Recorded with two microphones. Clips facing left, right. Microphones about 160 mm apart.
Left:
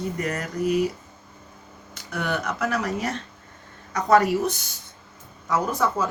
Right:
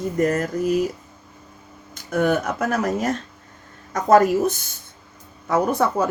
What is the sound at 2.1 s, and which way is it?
A woman's voice, 45° right (ahead or behind).